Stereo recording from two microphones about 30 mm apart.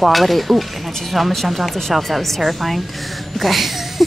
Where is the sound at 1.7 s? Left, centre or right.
Centre.